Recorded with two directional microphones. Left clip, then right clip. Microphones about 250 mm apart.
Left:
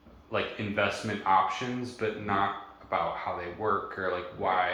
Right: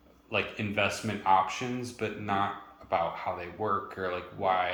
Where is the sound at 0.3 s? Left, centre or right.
Right.